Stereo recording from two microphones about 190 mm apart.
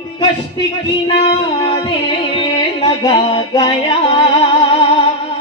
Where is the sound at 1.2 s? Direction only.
25° left (ahead or behind).